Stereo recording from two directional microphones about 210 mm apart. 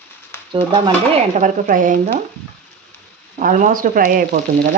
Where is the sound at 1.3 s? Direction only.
35° right (ahead or behind).